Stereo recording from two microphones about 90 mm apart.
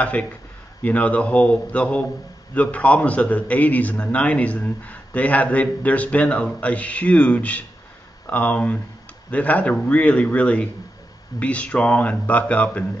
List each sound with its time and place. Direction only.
0.0 s a man's voice: 15° left (ahead or behind)